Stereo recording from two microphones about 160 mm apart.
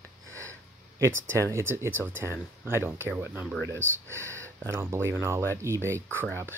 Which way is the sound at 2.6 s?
15° right (ahead or behind).